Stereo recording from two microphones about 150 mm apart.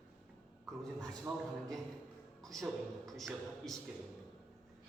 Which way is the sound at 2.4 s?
Centre (ahead or behind).